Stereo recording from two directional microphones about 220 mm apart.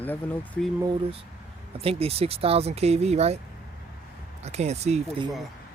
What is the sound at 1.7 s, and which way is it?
Speech, 25° right (ahead or behind).